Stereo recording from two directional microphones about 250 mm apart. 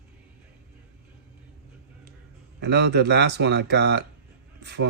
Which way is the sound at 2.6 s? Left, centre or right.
Right.